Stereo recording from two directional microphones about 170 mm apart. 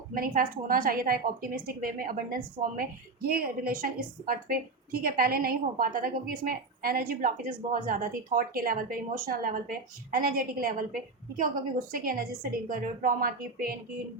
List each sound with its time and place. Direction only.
0.1 s a woman's voice: 55° right (ahead or behind)